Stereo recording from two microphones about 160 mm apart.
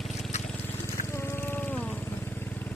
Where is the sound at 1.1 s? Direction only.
15° left (ahead or behind).